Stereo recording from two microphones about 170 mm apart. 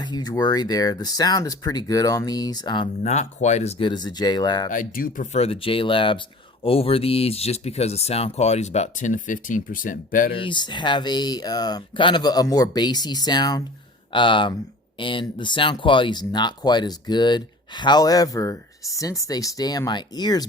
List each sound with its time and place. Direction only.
0.0 s speech: 25° left (ahead or behind)
3.0 s speech: 40° left (ahead or behind); by 4.7 s 25° left (ahead or behind)
4.7 s speech: 55° left (ahead or behind)
10.3 s speech: 30° left (ahead or behind)